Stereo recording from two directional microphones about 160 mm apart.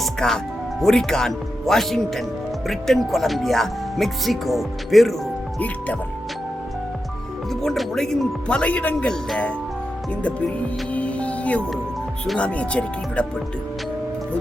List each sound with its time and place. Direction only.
0.0 s music: centre (ahead or behind)
0.8 s speech: 5° left (ahead or behind)
7.5 s speech: centre (ahead or behind)
10.9 s speech: 10° left (ahead or behind)